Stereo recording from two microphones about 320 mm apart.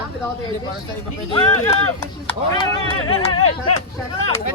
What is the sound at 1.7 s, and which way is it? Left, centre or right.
Speech, centre.